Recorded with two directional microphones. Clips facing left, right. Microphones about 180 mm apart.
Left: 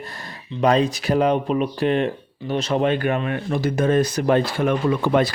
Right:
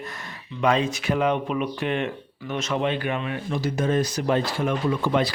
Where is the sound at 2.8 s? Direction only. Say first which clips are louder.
Left 5 dB; 50° left (ahead or behind).